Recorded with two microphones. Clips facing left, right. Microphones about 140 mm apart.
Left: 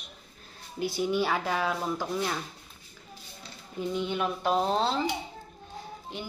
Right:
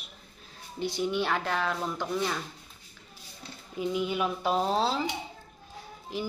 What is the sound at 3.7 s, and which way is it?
Speech, 5° right (ahead or behind).